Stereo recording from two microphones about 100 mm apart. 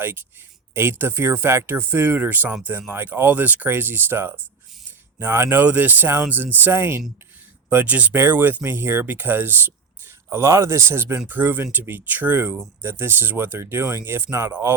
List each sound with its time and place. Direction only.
0.0 s speech: 20° right (ahead or behind)